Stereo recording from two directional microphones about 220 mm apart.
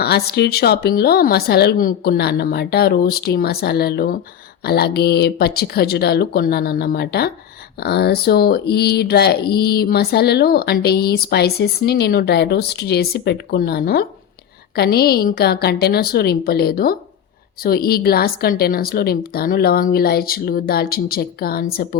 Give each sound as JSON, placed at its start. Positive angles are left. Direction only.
{"t": 0.0, "sound": "speech", "side_deg": 45}